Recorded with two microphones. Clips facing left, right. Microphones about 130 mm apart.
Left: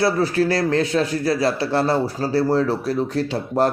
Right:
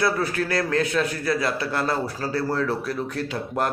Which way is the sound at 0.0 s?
30° left (ahead or behind).